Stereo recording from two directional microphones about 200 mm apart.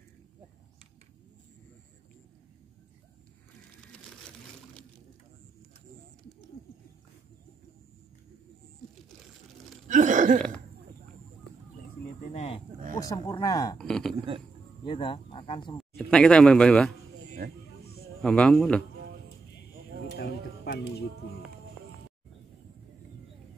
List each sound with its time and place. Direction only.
3.9 s a sound: 5° left (ahead or behind)
9.8 s a sound: 40° right (ahead or behind)
12.2 s a sound: 35° left (ahead or behind)
13.0 s speech: 20° left (ahead or behind)
13.7 s speech: 5° left (ahead or behind)
14.9 s speech: 25° left (ahead or behind)
15.8 s speech: 5° left (ahead or behind)
18.2 s speech: 5° left (ahead or behind)
20.2 s speech: 55° left (ahead or behind)